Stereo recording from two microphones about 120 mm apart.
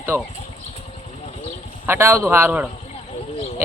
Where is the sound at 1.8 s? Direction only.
20° right (ahead or behind).